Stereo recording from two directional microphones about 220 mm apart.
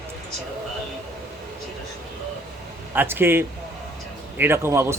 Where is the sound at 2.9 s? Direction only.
10° right (ahead or behind).